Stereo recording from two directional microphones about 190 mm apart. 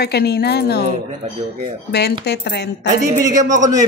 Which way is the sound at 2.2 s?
60° left (ahead or behind).